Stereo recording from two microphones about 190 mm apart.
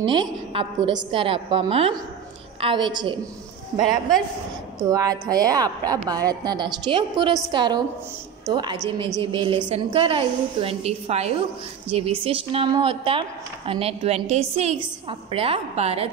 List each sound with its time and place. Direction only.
0.0 s a woman's voice: 25° right (ahead or behind)
4.8 s a woman's voice: 20° right (ahead or behind)